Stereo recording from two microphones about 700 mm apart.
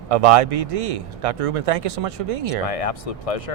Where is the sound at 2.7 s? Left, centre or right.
Left.